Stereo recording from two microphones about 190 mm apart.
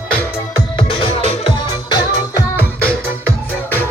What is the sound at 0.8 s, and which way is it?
Music, 30° left (ahead or behind).